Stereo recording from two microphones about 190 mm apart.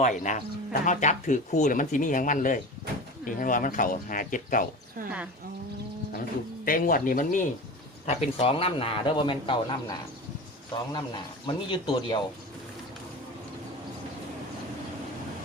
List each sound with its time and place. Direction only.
0.0 s speech: 40° left (ahead or behind)
6.7 s a man's voice: 45° left (ahead or behind); by 12.2 s 25° left (ahead or behind)